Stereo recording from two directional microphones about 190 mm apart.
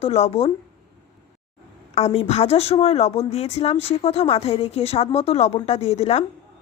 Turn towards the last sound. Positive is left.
turn(degrees=35)  # may be behind; listen again after turning